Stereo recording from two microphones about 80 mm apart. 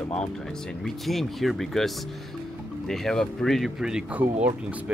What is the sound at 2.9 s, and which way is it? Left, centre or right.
Speech, centre.